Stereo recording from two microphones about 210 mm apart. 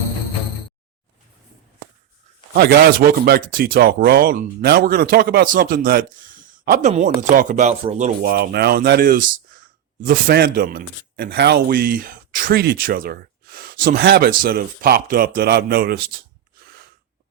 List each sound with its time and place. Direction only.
2.5 s speech: 50° right (ahead or behind)